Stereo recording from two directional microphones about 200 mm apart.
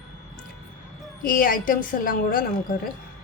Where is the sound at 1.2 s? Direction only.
45° left (ahead or behind).